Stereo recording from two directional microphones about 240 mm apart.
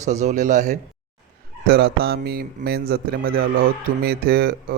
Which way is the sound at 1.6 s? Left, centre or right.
Right.